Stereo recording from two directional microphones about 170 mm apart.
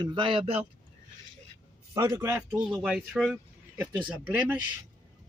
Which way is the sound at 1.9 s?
20° right (ahead or behind).